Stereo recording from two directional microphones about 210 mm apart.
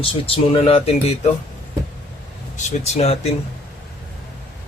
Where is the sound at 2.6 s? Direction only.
30° left (ahead or behind).